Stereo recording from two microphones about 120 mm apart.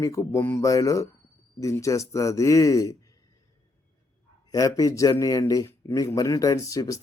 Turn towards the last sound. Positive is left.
turn(degrees=30)  # may be behind; listen again after turning